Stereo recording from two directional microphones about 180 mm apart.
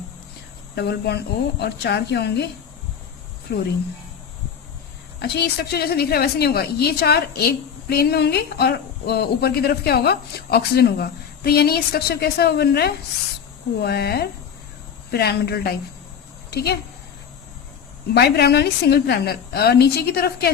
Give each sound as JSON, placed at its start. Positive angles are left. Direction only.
{"t": 0.8, "sound": "speech", "side_deg": 65}
{"t": 3.5, "sound": "speech", "side_deg": 65}
{"t": 5.2, "sound": "speech", "side_deg": 65}
{"t": 18.1, "sound": "speech", "side_deg": 65}